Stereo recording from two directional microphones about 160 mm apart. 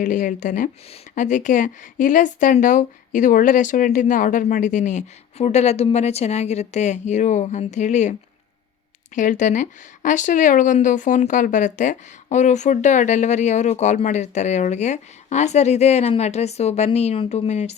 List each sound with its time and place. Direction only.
0.0 s speech: 50° left (ahead or behind)
9.1 s speech: 50° left (ahead or behind)